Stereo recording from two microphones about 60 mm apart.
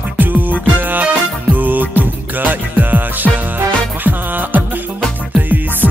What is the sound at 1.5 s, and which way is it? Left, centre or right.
Music of bollywood, right.